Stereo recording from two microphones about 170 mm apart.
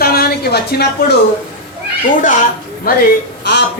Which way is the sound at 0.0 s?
65° left (ahead or behind).